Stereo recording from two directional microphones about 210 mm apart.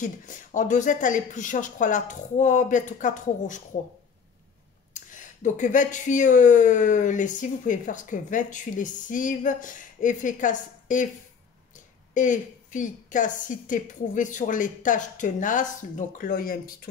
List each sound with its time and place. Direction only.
0.0 s speech: 35° left (ahead or behind)
4.9 s speech: 35° left (ahead or behind)
12.1 s speech: 35° left (ahead or behind)